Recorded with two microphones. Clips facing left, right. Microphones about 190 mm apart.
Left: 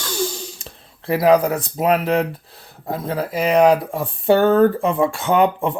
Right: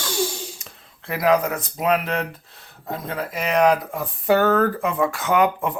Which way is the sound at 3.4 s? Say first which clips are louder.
Left 4 dB; 30° left (ahead or behind).